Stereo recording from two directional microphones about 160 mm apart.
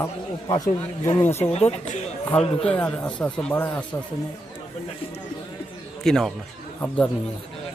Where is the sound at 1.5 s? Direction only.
40° left (ahead or behind).